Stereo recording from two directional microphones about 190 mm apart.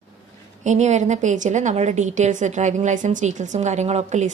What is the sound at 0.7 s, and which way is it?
A woman's voice, 40° right (ahead or behind).